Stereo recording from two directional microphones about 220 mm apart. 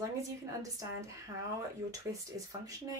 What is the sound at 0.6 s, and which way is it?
Speech, 15° right (ahead or behind).